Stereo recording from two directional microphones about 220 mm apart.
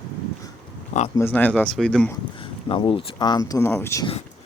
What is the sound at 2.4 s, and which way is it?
Speech, 25° left (ahead or behind).